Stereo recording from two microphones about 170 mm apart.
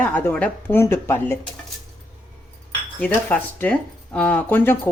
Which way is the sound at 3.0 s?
5° left (ahead or behind).